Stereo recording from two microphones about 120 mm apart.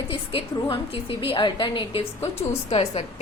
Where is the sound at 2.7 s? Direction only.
55° left (ahead or behind).